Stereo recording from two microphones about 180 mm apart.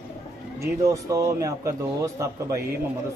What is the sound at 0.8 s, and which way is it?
A man's voice, 20° right (ahead or behind).